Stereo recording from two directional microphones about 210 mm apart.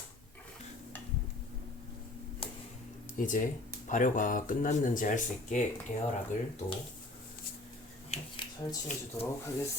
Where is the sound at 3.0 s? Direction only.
40° left (ahead or behind).